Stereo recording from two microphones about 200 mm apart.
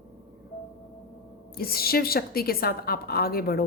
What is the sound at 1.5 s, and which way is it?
A woman's voice, 50° left (ahead or behind).